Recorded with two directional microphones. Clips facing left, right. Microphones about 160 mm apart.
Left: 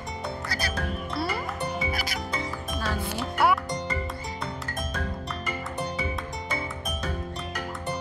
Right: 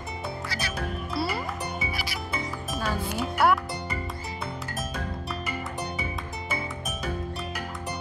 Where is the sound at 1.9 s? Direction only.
45° left (ahead or behind).